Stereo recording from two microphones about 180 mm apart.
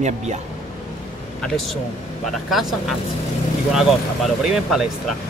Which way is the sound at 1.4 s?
Centre (ahead or behind).